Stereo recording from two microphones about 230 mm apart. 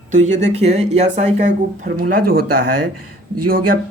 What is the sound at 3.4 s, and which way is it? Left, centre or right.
Speech, right.